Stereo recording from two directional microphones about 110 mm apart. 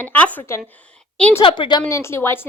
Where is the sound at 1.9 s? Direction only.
25° left (ahead or behind).